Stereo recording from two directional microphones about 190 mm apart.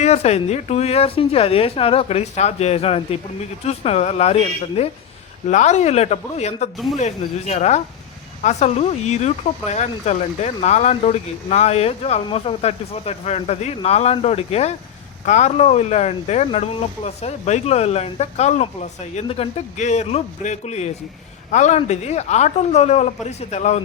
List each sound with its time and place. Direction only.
0.0 s speech: 35° left (ahead or behind)
6.7 s speech: centre (ahead or behind)
7.0 s speech: 35° left (ahead or behind)